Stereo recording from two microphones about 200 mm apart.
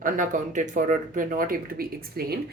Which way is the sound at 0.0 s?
40° right (ahead or behind).